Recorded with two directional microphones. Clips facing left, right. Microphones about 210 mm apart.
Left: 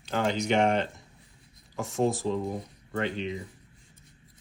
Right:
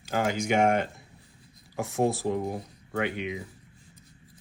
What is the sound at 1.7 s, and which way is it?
Speech, 65° right (ahead or behind).